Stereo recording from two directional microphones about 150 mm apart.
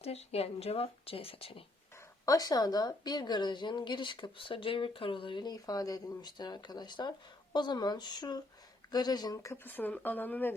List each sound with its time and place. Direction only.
0.0 s a woman's voice: 45° left (ahead or behind)
2.2 s a woman's voice: 25° left (ahead or behind)